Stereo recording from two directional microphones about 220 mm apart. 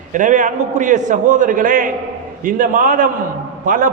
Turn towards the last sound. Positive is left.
turn(degrees=-40)  # may be behind; listen again after turning